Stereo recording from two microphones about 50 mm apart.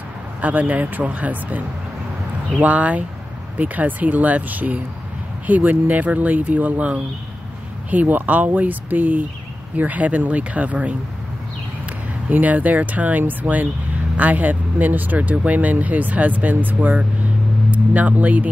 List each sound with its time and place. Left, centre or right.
0.4 s speech: right
2.6 s speech: right
12.3 s speech: right